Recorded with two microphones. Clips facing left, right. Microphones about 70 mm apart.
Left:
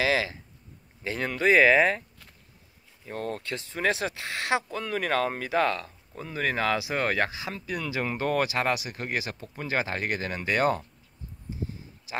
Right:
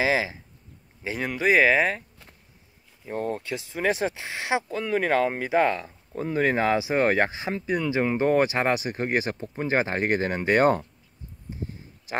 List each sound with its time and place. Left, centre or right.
0.0 s speech: centre
3.1 s speech: centre
6.1 s speech: right